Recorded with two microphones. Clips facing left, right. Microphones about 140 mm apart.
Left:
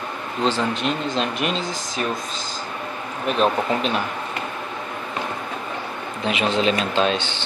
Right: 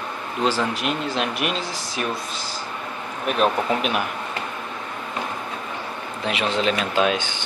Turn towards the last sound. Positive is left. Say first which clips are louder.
# even
turn(degrees=-10)  # may be behind; listen again after turning